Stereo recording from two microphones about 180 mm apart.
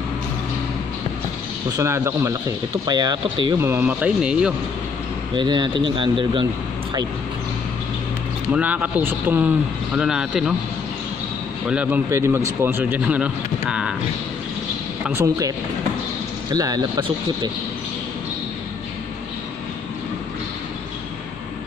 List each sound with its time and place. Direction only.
1.8 s a man's voice: 15° right (ahead or behind)
3.5 s a man's voice: 10° right (ahead or behind)
5.3 s speech: 25° right (ahead or behind)
8.5 s a man's voice: 10° right (ahead or behind)
11.6 s a man's voice: 10° right (ahead or behind)
15.0 s a man's voice: 15° right (ahead or behind)
16.5 s speech: 20° right (ahead or behind)